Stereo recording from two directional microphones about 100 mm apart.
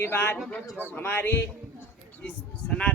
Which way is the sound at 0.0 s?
20° left (ahead or behind).